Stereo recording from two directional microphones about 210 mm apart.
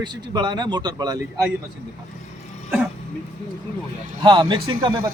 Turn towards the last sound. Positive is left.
turn(degrees=-25)  # may be behind; listen again after turning